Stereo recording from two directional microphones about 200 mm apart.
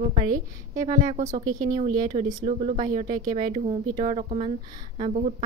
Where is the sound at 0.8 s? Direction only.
35° right (ahead or behind).